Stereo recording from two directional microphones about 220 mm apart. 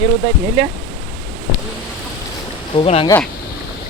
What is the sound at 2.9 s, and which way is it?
Speech, 25° left (ahead or behind).